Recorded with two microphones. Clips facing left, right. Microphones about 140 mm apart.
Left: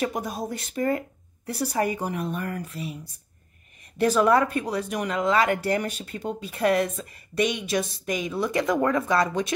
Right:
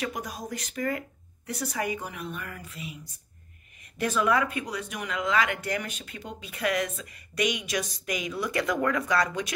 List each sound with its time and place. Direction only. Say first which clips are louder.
0.0 s speech: left 6 dB; 25° left (ahead or behind)
4.0 s speech: left 6 dB; 35° left (ahead or behind)